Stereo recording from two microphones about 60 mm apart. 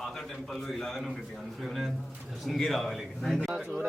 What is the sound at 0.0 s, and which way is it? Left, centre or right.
A man's voice, centre.